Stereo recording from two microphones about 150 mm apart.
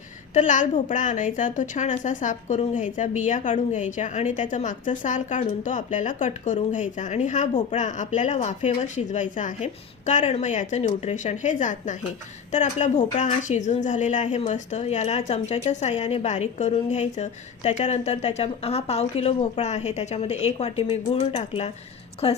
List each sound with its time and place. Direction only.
0.3 s a woman's voice: 55° left (ahead or behind); by 22.4 s 40° left (ahead or behind)